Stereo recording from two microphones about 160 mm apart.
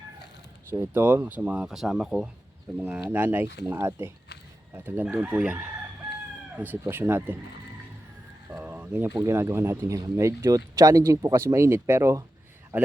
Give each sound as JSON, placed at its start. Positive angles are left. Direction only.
{"t": 0.7, "sound": "speech", "side_deg": -15}
{"t": 8.4, "sound": "a man's voice", "side_deg": -10}